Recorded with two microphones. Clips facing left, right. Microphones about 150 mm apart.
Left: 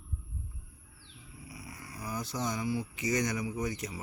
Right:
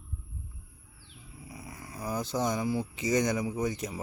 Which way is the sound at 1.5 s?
25° right (ahead or behind).